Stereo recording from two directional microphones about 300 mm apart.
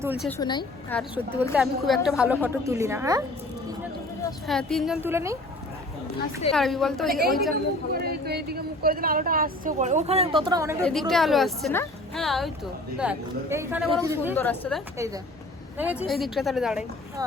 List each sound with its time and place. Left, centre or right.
0.0 s a woman's voice: centre
0.3 s a woman's voice: centre
0.9 s a woman's voice: centre
4.4 s a woman's voice: centre
6.5 s a woman's voice: centre
7.1 s a woman's voice: right; by 14.3 s centre
14.3 s a woman's voice: centre
14.9 s a woman's voice: centre